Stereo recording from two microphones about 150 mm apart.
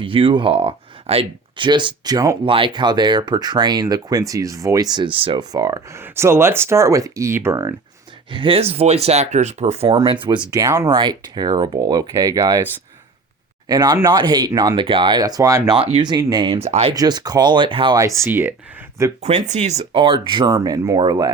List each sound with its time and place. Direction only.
0.0 s speech: 35° right (ahead or behind)
2.4 s speech: 35° right (ahead or behind)
8.3 s speech: 35° right (ahead or behind)
10.5 s speech: 20° right (ahead or behind)
13.7 s speech: 25° right (ahead or behind)
15.7 s speech: 35° right (ahead or behind)
16.6 s speech: 45° right (ahead or behind)
16.9 s speech: 25° right (ahead or behind)
17.9 s speech: 20° right (ahead or behind)
19.2 s speech: 50° right (ahead or behind); by 21.2 s 30° right (ahead or behind)